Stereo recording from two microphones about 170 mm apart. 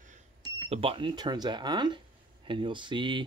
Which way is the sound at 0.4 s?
35° right (ahead or behind).